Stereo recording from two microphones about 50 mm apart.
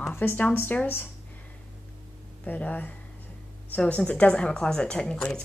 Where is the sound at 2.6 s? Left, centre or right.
Left.